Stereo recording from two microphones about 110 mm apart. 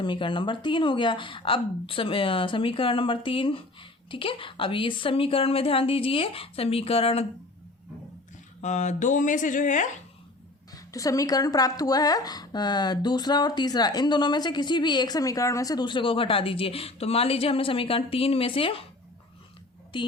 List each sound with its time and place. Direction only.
0.0 s a woman's voice: 50° left (ahead or behind)
8.6 s a sound: 90° left
10.8 s speech: 30° left (ahead or behind); by 18.9 s 55° left (ahead or behind)
19.9 s a woman's voice: 45° left (ahead or behind)